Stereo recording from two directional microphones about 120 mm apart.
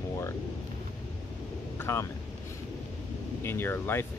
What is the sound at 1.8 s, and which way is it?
Speech, 20° left (ahead or behind).